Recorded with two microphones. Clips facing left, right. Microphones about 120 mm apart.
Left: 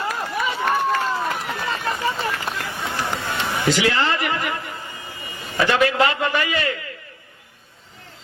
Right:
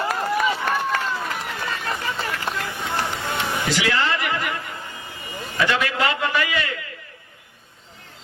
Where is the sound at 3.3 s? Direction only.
15° right (ahead or behind).